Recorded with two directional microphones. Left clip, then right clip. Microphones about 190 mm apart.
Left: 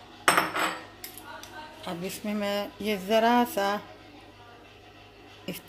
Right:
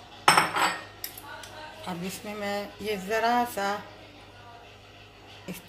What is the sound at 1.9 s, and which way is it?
Speech, 60° left (ahead or behind).